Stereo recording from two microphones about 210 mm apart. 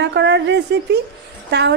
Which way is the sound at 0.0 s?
55° right (ahead or behind).